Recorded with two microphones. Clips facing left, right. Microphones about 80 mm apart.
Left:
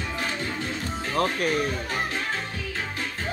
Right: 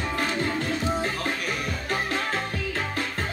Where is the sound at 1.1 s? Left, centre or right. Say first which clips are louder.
Left 5 dB; left.